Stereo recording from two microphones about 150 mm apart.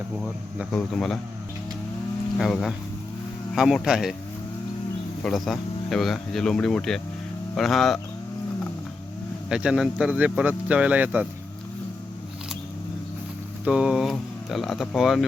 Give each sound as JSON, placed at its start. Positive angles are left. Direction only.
{"t": 0.2, "sound": "speech", "side_deg": 5}
{"t": 2.4, "sound": "speech", "side_deg": 0}
{"t": 5.2, "sound": "speech", "side_deg": 0}
{"t": 9.5, "sound": "speech", "side_deg": -5}
{"t": 13.7, "sound": "speech", "side_deg": -5}